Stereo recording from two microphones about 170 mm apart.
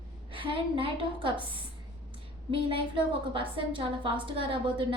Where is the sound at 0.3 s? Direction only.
30° right (ahead or behind).